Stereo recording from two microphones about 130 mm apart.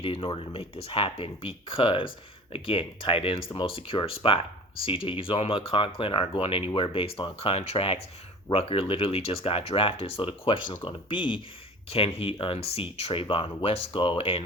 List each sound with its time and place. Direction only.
0.0 s speech: 45° left (ahead or behind)